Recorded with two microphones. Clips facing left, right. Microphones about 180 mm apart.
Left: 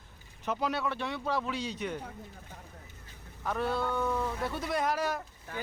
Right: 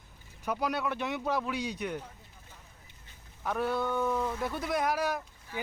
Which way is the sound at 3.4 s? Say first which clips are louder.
Right 1 dB; 10° right (ahead or behind).